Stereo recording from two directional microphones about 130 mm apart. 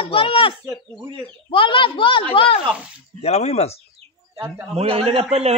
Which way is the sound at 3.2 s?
55° left (ahead or behind).